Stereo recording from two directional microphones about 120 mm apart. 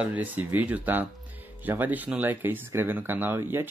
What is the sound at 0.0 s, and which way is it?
Speech, 15° right (ahead or behind).